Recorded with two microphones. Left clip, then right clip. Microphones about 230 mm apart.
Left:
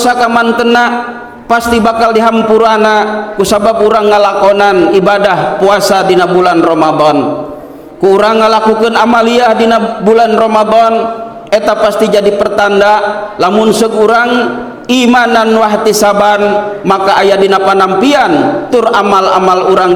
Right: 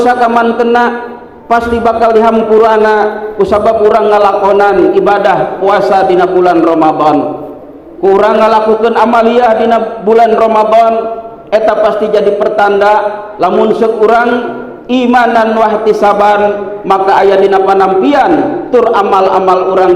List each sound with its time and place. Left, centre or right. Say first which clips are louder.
0.0 s a man's voice: right 1 dB; left